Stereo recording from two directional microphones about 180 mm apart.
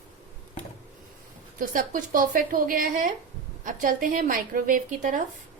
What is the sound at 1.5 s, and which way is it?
A woman's voice, 50° right (ahead or behind).